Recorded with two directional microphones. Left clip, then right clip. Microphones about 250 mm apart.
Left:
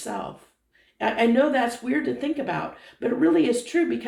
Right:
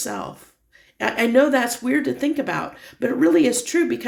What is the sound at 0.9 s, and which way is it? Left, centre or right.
Speech, right.